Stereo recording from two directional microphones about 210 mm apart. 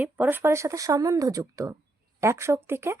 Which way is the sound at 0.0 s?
10° right (ahead or behind).